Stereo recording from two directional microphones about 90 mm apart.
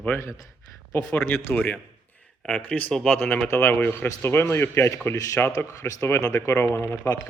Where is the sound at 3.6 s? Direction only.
20° left (ahead or behind); by 6.4 s 35° left (ahead or behind).